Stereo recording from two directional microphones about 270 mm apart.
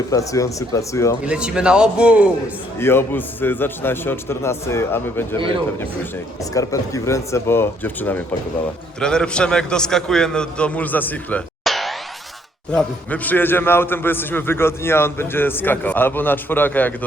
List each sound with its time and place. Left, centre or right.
0.1 s a man's voice: centre
1.2 s a man's voice: centre
2.7 s a man's voice: centre
6.5 s a man's voice: centre